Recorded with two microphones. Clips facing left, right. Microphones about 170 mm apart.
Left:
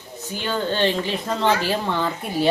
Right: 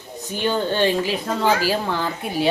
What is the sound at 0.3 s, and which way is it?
Speech, 15° right (ahead or behind).